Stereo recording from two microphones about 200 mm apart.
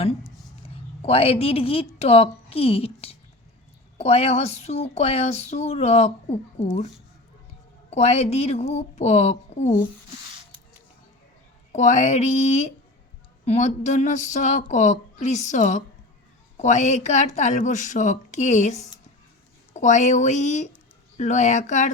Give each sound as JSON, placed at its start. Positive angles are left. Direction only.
{"t": 1.0, "sound": "a woman's voice", "side_deg": 30}
{"t": 7.9, "sound": "a woman's voice", "side_deg": 35}
{"t": 11.7, "sound": "a woman's voice", "side_deg": 35}